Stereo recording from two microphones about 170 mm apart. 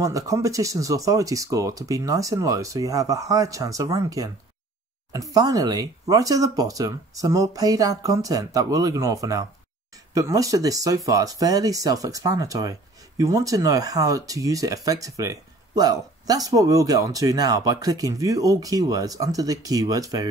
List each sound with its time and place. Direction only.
0.0 s speech: 20° right (ahead or behind)